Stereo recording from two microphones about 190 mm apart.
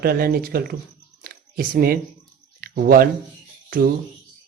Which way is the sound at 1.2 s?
50° right (ahead or behind).